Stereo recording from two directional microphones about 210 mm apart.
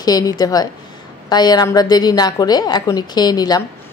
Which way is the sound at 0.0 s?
15° left (ahead or behind).